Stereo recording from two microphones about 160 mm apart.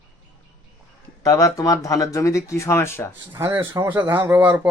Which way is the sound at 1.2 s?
20° left (ahead or behind).